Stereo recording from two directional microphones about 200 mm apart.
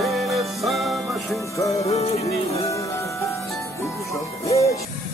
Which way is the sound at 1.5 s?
15° left (ahead or behind).